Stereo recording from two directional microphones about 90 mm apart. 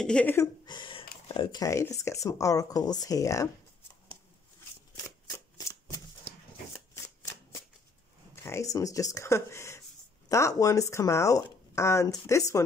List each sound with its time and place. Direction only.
0.0 s speech: 10° left (ahead or behind)
0.7 s a sound: 60° left (ahead or behind)
1.6 s speech: 35° left (ahead or behind)
7.0 s shuffling cards: 35° left (ahead or behind)
8.4 s speech: 30° left (ahead or behind)